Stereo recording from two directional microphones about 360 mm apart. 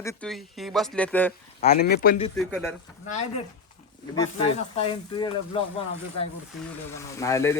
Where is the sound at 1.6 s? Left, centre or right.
Left.